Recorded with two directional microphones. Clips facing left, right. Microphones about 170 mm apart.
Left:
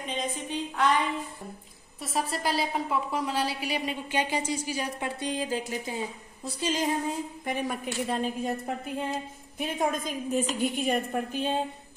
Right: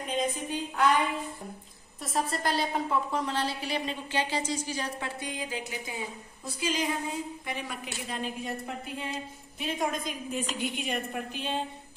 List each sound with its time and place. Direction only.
0.0 s a woman's voice: 5° right (ahead or behind)
5.2 s a sound: 35° left (ahead or behind)
7.4 s a woman's voice: 45° left (ahead or behind)